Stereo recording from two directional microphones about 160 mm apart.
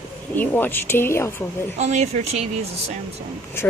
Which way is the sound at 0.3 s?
10° left (ahead or behind).